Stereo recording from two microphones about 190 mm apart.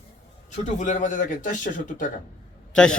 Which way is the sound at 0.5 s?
40° left (ahead or behind).